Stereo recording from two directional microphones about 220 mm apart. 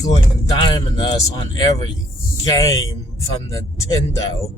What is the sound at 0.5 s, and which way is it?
A man's voice, 20° left (ahead or behind).